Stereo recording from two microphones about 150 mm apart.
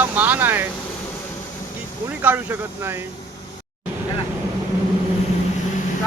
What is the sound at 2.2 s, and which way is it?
Speech, 15° right (ahead or behind).